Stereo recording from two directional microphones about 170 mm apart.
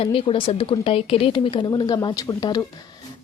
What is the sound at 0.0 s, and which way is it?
A woman's voice, 35° left (ahead or behind).